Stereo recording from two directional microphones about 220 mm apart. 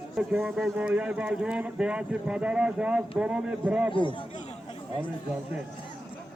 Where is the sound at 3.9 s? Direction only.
20° left (ahead or behind).